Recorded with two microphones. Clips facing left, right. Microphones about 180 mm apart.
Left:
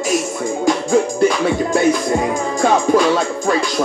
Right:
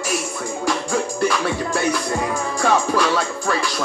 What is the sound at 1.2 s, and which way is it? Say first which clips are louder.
Music: left 6 dB; 20° left (ahead or behind).